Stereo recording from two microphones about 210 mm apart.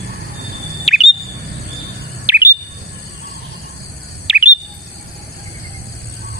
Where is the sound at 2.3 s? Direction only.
10° right (ahead or behind).